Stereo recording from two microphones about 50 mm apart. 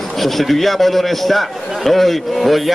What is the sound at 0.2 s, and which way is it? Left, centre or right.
A man's voice, centre.